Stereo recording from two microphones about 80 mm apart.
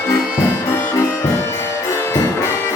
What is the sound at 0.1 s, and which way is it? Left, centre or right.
Music, left.